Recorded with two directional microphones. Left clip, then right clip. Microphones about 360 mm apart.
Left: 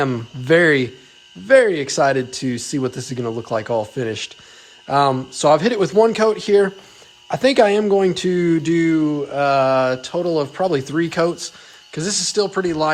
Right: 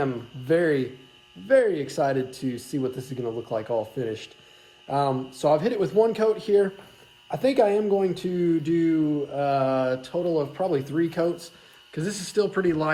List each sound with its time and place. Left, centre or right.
0.0 s speech: left